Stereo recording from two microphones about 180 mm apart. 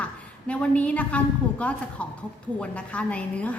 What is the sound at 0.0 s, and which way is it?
A woman's voice, 5° left (ahead or behind).